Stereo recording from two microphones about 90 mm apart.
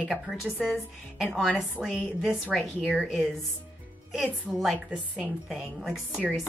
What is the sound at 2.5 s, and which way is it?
Speech, 5° left (ahead or behind).